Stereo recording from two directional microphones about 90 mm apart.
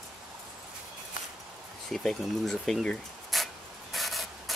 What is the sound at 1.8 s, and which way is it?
Speech, 5° left (ahead or behind).